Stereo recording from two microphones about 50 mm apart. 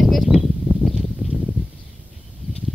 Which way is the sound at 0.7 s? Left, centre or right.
Right.